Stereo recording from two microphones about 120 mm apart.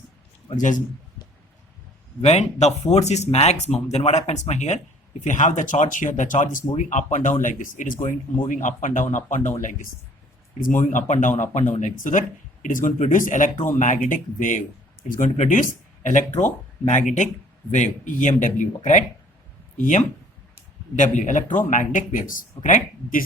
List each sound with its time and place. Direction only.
2.2 s speech: 70° left (ahead or behind)
5.2 s speech: 90° left